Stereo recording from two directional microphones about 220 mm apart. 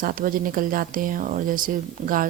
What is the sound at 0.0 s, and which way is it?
Speech, 40° right (ahead or behind).